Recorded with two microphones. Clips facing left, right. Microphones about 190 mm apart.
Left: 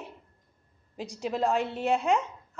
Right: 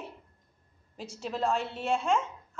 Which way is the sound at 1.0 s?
15° left (ahead or behind).